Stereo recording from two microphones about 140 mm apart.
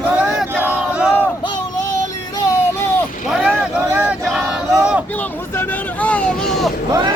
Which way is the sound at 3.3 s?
5° right (ahead or behind).